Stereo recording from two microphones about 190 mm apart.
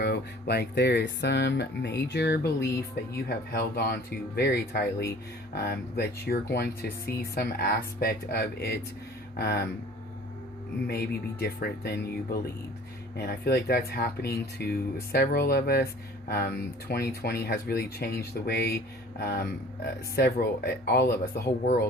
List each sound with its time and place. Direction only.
0.0 s speech: 60° left (ahead or behind)
10.8 s speech: 55° left (ahead or behind)